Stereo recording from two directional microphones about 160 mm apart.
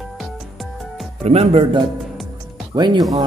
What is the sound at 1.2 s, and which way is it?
Speech, 40° right (ahead or behind).